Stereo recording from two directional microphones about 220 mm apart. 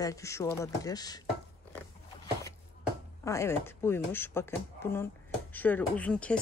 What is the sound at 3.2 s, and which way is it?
Speech, 15° left (ahead or behind).